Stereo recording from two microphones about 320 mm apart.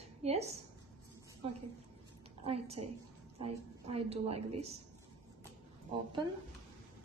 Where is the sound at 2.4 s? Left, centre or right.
Centre.